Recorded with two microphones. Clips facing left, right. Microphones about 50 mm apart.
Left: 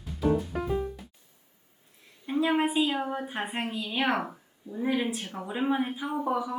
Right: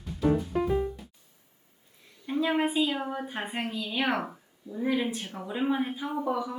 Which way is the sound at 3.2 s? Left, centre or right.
Centre.